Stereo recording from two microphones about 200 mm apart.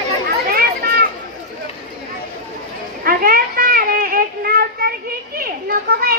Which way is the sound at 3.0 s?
45° right (ahead or behind).